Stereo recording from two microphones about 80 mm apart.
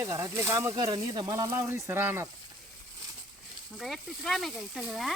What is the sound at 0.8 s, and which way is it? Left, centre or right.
Speech, right.